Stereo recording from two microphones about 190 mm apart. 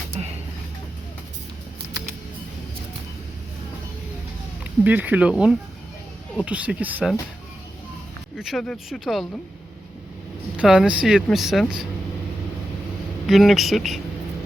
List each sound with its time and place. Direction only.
4.6 s speech: 10° right (ahead or behind)
8.4 s speech: centre (ahead or behind)
10.6 s speech: 5° right (ahead or behind)
13.2 s speech: centre (ahead or behind)